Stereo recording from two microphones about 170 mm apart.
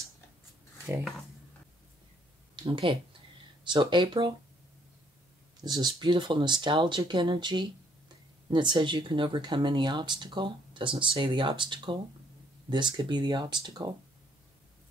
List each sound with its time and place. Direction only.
2.5 s speech: 30° right (ahead or behind)
5.6 s speech: 25° right (ahead or behind)